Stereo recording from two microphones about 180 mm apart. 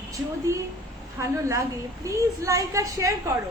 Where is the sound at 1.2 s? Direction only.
15° right (ahead or behind).